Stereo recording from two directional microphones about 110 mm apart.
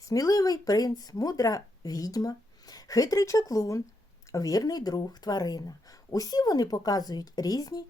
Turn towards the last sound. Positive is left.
turn(degrees=35)  # may be behind; listen again after turning